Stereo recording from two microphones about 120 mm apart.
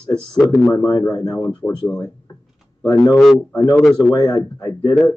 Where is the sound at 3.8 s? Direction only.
Centre (ahead or behind).